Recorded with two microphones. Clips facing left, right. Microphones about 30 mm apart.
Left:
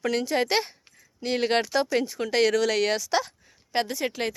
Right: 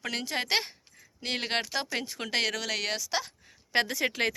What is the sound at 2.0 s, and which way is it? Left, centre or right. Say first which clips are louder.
Speech: left 7 dB; right.